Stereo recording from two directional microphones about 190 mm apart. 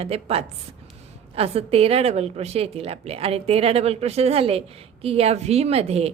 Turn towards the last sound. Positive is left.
turn(degrees=-35)  # may be behind; listen again after turning